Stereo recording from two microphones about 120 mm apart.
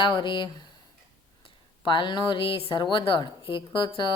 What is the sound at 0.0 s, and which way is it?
Speech, 40° left (ahead or behind).